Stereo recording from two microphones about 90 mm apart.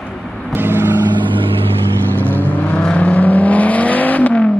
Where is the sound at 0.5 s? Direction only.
25° right (ahead or behind).